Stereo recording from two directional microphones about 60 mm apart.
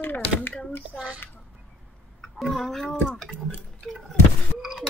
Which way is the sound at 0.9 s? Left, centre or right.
Centre.